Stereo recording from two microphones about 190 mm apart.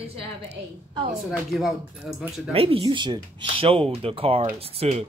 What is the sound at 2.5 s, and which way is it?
Speech, 30° right (ahead or behind).